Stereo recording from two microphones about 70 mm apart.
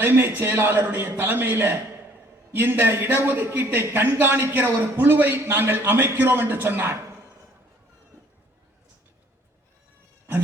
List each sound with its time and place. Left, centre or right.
0.0 s a man's voice: right